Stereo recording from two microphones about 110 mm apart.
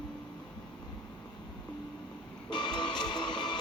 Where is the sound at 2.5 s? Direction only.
45° left (ahead or behind).